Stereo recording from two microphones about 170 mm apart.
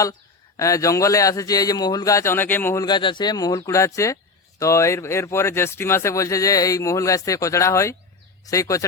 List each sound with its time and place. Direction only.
0.5 s a man's voice: 20° left (ahead or behind)